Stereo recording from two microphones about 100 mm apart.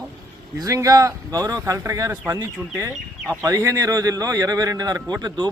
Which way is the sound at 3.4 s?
35° right (ahead or behind).